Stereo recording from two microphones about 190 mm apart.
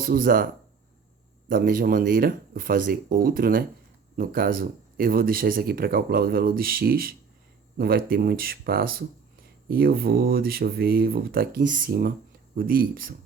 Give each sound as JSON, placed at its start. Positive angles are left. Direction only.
{"t": 0.0, "sound": "speech", "side_deg": -50}
{"t": 1.5, "sound": "speech", "side_deg": -45}